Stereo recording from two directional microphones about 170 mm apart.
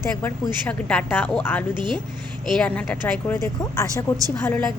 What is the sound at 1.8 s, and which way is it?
Speech, 25° right (ahead or behind).